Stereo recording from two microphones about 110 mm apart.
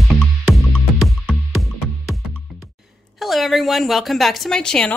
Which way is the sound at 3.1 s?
Centre (ahead or behind).